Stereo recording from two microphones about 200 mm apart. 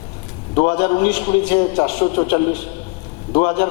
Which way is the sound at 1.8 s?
15° left (ahead or behind).